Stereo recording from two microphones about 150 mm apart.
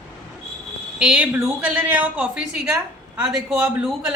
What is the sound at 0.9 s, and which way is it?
A man's voice, 5° right (ahead or behind).